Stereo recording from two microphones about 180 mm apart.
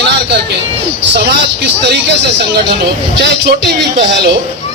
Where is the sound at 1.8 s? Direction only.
70° right (ahead or behind).